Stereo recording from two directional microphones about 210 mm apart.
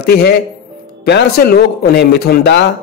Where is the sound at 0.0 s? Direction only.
50° left (ahead or behind).